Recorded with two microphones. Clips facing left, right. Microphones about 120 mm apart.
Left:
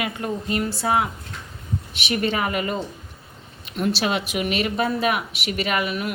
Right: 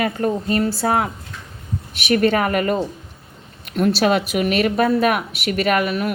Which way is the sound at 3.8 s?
45° right (ahead or behind).